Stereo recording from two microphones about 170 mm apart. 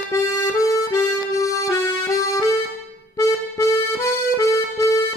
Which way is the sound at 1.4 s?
20° left (ahead or behind).